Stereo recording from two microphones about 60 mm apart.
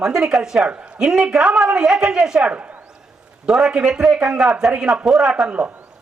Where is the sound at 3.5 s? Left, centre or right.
Centre.